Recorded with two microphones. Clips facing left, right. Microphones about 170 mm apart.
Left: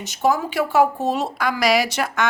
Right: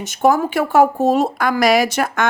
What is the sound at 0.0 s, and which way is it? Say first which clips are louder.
Speech: right 5 dB; 50° right (ahead or behind).